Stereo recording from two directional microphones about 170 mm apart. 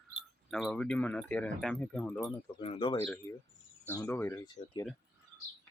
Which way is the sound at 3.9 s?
15° left (ahead or behind).